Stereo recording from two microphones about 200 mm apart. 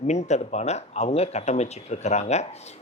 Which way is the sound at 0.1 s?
35° left (ahead or behind).